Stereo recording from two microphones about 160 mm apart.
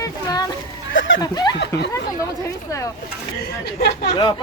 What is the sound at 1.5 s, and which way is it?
Speech, 90° left.